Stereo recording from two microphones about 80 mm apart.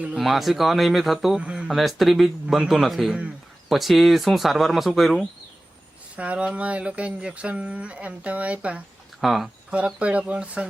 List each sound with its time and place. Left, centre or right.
0.2 s speech: centre
1.4 s speech: centre
1.7 s speech: centre
6.1 s speech: centre
9.2 s speech: centre
9.6 s speech: centre